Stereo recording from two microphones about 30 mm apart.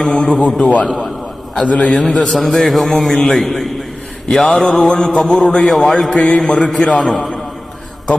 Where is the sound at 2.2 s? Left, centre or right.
Centre.